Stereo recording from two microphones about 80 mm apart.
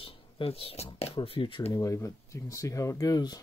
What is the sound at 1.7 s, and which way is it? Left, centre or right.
Speech, left.